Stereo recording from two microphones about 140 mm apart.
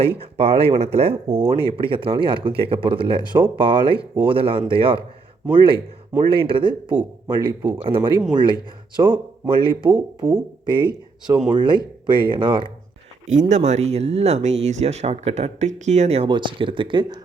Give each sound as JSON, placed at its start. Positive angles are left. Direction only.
{"t": 0.2, "sound": "speech", "side_deg": -45}
{"t": 13.5, "sound": "speech", "side_deg": -55}
{"t": 16.3, "sound": "speech", "side_deg": -35}